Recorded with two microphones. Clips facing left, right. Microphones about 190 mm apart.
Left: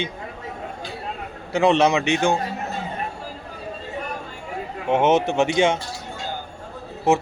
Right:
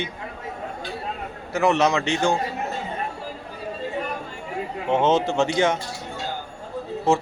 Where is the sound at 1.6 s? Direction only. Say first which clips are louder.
Left 3 dB; 30° left (ahead or behind).